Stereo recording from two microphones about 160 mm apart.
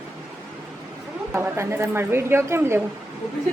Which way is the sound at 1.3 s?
15° right (ahead or behind).